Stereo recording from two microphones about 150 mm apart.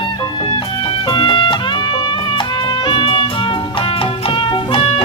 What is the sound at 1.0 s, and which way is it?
Music, 35° left (ahead or behind).